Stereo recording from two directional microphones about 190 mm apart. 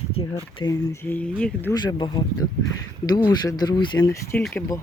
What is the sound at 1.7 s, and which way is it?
Speech, 20° left (ahead or behind).